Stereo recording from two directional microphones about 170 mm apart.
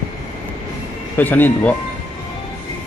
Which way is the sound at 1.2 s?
10° left (ahead or behind).